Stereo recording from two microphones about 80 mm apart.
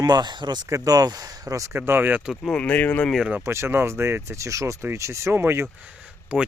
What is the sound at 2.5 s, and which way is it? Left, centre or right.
Speech, centre.